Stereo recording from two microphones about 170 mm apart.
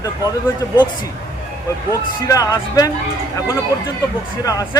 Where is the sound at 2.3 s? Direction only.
20° left (ahead or behind).